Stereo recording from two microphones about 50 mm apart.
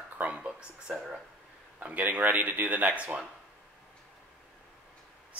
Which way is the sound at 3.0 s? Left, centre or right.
Right.